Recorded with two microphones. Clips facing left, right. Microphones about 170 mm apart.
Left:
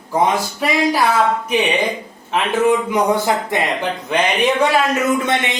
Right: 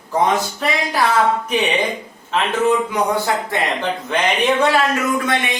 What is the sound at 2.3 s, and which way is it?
Speech, 15° left (ahead or behind).